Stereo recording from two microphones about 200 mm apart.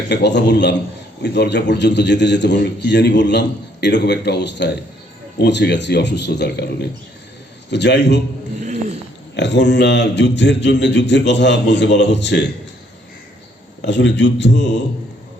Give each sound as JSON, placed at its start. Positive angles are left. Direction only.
{"t": 0.1, "sound": "a man's voice", "side_deg": 60}
{"t": 7.7, "sound": "a man's voice", "side_deg": 60}
{"t": 8.6, "sound": "a sound", "side_deg": -35}
{"t": 9.3, "sound": "a man's voice", "side_deg": 60}
{"t": 13.8, "sound": "a man's voice", "side_deg": 60}